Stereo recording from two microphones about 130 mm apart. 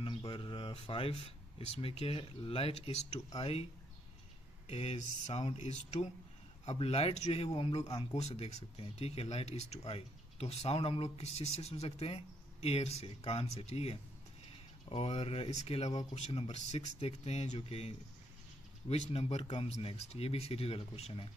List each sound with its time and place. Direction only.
0.0 s speech: 40° left (ahead or behind)
4.6 s speech: 55° left (ahead or behind)